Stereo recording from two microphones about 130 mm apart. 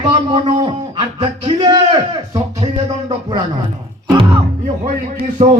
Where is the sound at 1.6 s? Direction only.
35° right (ahead or behind).